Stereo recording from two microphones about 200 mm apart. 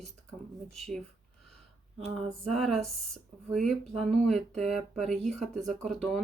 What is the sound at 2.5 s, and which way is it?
Speech, centre (ahead or behind).